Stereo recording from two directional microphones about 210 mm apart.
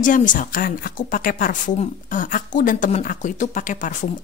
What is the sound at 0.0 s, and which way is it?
A woman's voice, 40° left (ahead or behind).